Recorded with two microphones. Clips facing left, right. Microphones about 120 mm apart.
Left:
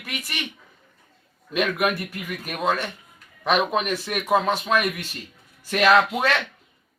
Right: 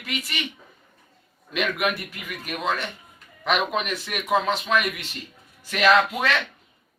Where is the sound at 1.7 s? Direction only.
40° left (ahead or behind).